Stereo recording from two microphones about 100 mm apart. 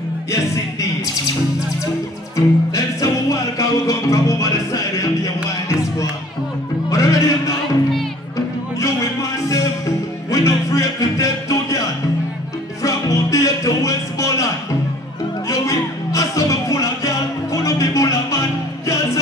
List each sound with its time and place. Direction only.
2.3 s music: 35° left (ahead or behind)
6.9 s music: 35° left (ahead or behind)
9.5 s music: 35° left (ahead or behind)
12.8 s music: 35° left (ahead or behind)
15.4 s music: 30° left (ahead or behind)